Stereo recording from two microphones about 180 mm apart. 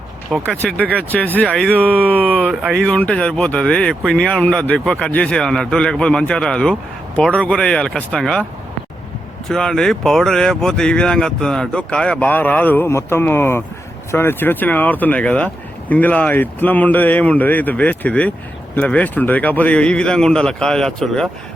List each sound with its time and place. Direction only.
0.6 s speech: 5° left (ahead or behind)
9.5 s speech: 5° left (ahead or behind)